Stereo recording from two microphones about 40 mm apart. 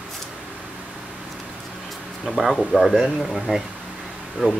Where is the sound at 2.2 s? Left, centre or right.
Centre.